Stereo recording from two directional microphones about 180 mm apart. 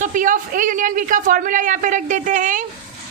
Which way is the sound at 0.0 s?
45° right (ahead or behind).